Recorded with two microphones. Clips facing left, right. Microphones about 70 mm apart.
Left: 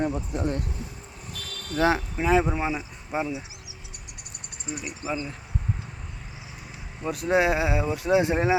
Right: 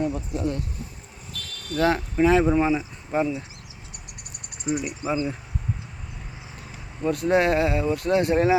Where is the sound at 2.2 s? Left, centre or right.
Centre.